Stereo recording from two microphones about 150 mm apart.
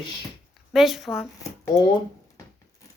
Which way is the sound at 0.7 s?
Centre (ahead or behind).